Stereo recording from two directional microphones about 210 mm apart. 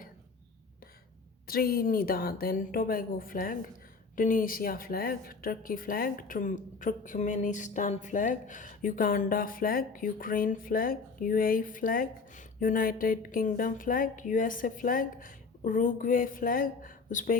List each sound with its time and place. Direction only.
1.5 s a woman's voice: 45° left (ahead or behind)